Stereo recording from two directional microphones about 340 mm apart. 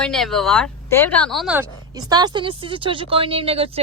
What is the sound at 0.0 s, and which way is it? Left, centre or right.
Speech, centre.